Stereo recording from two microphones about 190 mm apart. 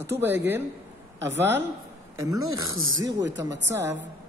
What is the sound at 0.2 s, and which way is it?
Speech, 10° right (ahead or behind).